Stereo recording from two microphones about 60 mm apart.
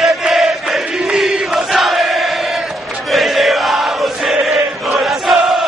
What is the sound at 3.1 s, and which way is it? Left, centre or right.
Chant, centre.